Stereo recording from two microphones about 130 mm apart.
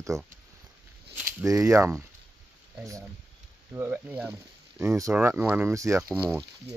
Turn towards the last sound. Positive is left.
turn(degrees=-20)  # may be behind; listen again after turning